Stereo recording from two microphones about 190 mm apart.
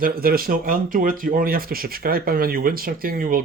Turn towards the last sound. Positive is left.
turn(degrees=-50)  # may be behind; listen again after turning